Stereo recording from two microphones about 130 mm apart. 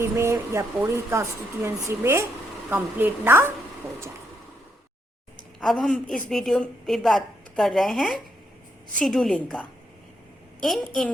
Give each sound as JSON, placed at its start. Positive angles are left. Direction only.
{"t": 0.0, "sound": "a woman's voice", "side_deg": -20}
{"t": 5.5, "sound": "a woman's voice", "side_deg": 5}